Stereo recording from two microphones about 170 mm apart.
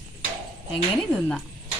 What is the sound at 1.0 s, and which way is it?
Speech, 5° left (ahead or behind).